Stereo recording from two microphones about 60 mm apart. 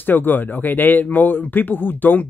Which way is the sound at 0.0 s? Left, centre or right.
Left.